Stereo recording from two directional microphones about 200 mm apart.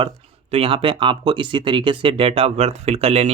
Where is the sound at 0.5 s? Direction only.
25° right (ahead or behind).